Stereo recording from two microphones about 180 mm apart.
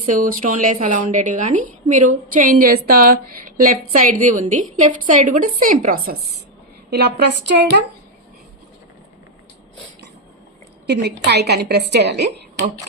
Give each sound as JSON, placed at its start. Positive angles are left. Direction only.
{"t": 0.1, "sound": "a woman's voice", "side_deg": -50}
{"t": 6.9, "sound": "a woman's voice", "side_deg": -65}
{"t": 10.8, "sound": "a woman's voice", "side_deg": -65}